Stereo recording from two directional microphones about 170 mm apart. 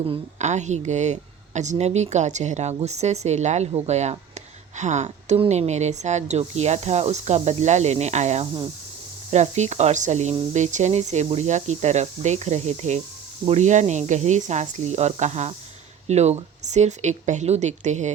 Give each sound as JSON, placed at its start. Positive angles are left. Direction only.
{"t": 0.1, "sound": "speech", "side_deg": -45}